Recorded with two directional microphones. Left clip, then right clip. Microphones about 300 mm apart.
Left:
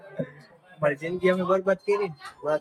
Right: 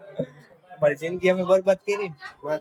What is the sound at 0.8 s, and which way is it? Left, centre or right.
Speech, centre.